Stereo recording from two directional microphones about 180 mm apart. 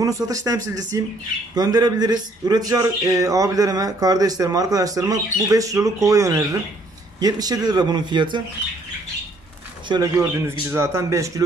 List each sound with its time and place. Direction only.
0.0 s a man's voice: 20° right (ahead or behind)
9.8 s a man's voice: 20° right (ahead or behind)